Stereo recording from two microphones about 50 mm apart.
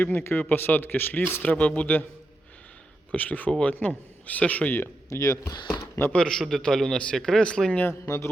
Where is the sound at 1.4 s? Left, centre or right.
Left.